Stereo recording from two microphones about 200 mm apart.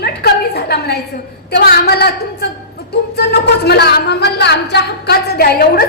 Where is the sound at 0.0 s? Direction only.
55° left (ahead or behind).